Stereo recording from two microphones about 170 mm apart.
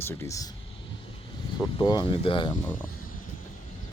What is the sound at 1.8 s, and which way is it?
Speech, 25° left (ahead or behind).